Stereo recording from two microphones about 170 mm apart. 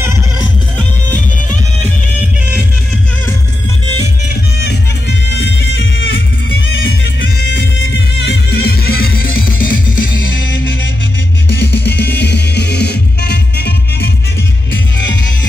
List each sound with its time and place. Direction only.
4.6 s music: 80° left
8.3 s music: 70° left (ahead or behind); by 10.0 s 55° left (ahead or behind)
11.5 s music: 75° left (ahead or behind)